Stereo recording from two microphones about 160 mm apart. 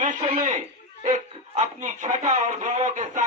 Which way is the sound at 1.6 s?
50° right (ahead or behind).